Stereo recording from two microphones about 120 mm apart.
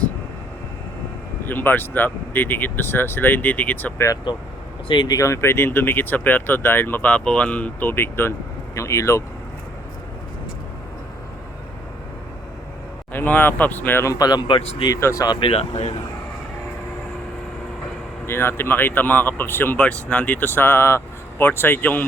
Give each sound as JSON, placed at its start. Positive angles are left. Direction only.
{"t": 1.5, "sound": "speech", "side_deg": 15}
{"t": 4.9, "sound": "speech", "side_deg": 40}
{"t": 5.1, "sound": "speech", "side_deg": 25}
{"t": 13.1, "sound": "speech", "side_deg": 15}
{"t": 14.9, "sound": "speech", "side_deg": 25}
{"t": 15.4, "sound": "speech", "side_deg": 55}
{"t": 18.3, "sound": "speech", "side_deg": 20}